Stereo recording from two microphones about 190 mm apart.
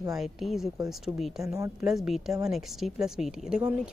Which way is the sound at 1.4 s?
15° right (ahead or behind).